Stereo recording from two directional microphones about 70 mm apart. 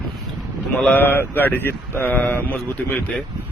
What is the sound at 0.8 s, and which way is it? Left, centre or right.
Speech, left.